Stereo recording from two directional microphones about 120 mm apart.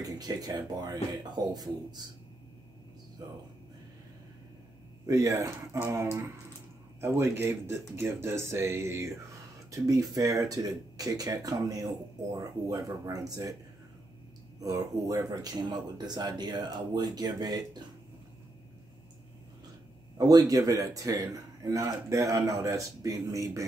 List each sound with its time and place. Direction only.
0.0 s speech: 35° right (ahead or behind)
5.0 s a man's voice: 25° right (ahead or behind)
14.6 s speech: 30° right (ahead or behind)
20.2 s a man's voice: 30° right (ahead or behind)